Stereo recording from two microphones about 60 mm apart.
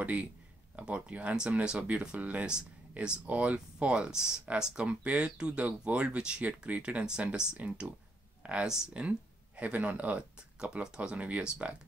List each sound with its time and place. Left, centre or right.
0.0 s speech: right
8.4 s a sound: right
9.0 s speech: right